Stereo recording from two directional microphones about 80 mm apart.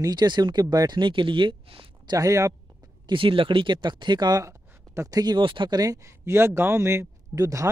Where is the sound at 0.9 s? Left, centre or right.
Right.